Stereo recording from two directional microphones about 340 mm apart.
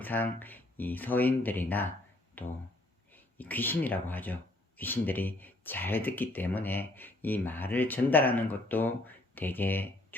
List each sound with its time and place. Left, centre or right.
0.0 s speech: centre